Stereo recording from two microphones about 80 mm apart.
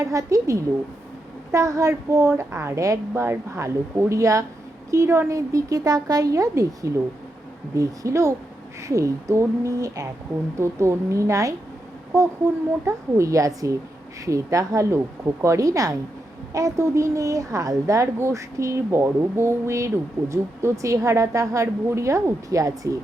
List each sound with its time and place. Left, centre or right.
0.0 s a woman's voice: right
12.8 s a woman's voice: right